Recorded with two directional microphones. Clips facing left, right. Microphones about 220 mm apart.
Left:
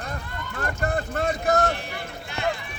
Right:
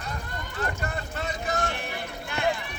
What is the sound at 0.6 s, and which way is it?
Vehicle, 50° left (ahead or behind).